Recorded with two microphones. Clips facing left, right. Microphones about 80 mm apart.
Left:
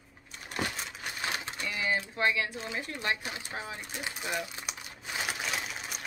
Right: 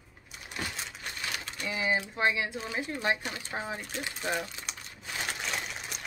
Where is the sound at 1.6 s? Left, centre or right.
Centre.